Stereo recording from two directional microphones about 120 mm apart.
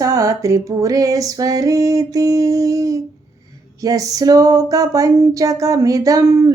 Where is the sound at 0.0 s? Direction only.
30° right (ahead or behind).